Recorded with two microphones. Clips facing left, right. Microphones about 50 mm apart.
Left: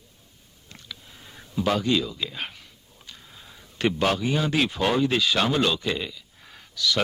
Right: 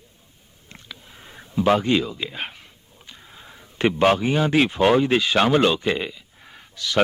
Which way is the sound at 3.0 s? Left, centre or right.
Right.